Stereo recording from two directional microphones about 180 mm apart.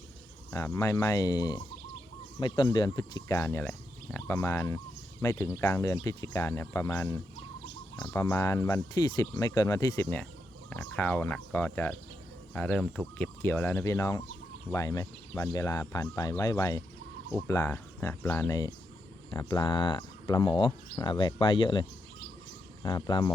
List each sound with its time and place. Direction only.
0.5 s speech: 15° left (ahead or behind)